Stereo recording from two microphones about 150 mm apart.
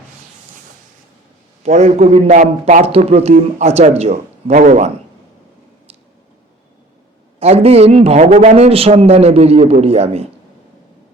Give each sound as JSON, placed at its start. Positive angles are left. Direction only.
{"t": 1.6, "sound": "a man's voice", "side_deg": -50}
{"t": 7.3, "sound": "a man's voice", "side_deg": -40}